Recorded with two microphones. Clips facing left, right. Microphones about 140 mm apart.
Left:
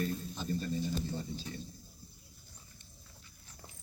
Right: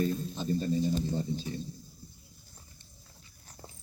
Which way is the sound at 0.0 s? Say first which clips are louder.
Right 6 dB; 25° right (ahead or behind).